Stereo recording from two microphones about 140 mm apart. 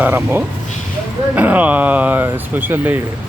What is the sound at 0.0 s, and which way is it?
Speech, 15° right (ahead or behind).